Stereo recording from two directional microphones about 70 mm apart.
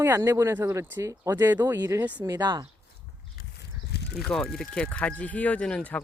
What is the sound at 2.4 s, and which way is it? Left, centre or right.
Speech, right.